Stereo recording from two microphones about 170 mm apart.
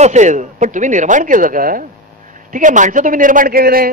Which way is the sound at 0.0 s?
45° right (ahead or behind).